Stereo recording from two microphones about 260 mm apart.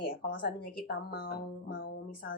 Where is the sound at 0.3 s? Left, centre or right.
Left.